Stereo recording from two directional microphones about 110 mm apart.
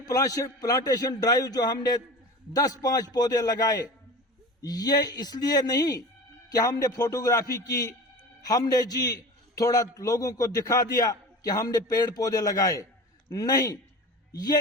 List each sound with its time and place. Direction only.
0.0 s a man's voice: 30° left (ahead or behind)